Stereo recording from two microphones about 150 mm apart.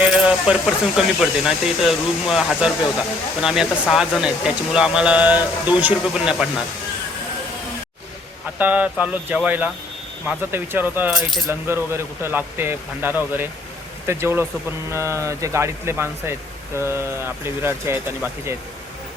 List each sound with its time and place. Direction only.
0.3 s speech: 5° right (ahead or behind)
8.5 s speech: 10° right (ahead or behind)